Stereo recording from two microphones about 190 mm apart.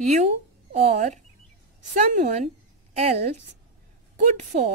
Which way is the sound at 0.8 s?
40° right (ahead or behind).